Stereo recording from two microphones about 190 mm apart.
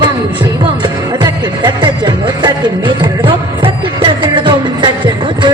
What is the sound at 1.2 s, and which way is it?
Music, 25° right (ahead or behind).